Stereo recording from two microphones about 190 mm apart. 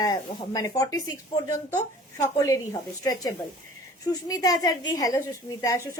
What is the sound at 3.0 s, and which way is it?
A woman's voice, 20° left (ahead or behind).